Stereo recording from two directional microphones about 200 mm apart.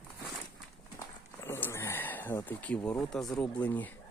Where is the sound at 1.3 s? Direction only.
10° left (ahead or behind).